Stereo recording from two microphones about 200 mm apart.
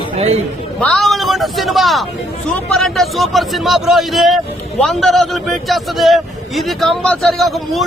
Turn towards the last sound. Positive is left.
turn(degrees=0)  # may be behind; listen again after turning